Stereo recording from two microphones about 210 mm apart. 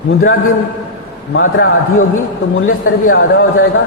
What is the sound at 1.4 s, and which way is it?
A man's voice, 75° left (ahead or behind).